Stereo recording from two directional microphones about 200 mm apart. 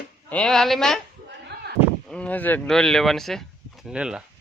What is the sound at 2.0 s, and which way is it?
Speech, 5° left (ahead or behind).